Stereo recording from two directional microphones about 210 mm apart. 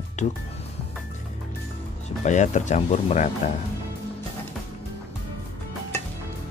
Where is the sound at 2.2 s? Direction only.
35° left (ahead or behind).